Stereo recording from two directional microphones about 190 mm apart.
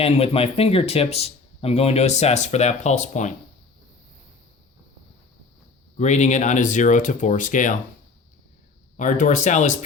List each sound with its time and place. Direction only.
0.0 s speech: 30° left (ahead or behind)
6.0 s speech: 40° left (ahead or behind)
9.0 s speech: 40° left (ahead or behind)